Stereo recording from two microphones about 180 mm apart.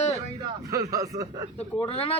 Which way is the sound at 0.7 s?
20° right (ahead or behind).